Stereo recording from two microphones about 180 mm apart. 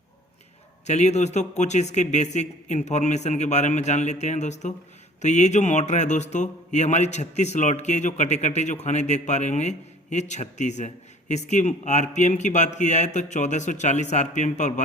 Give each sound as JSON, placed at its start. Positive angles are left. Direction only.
{"t": 0.9, "sound": "speech", "side_deg": 40}